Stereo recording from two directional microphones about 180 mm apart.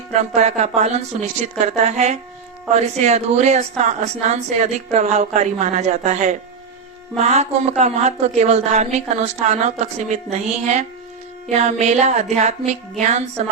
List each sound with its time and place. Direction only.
0.1 s a woman's voice: 40° right (ahead or behind)